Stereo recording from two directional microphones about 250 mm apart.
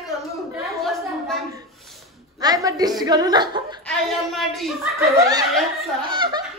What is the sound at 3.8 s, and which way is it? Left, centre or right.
Speech, centre.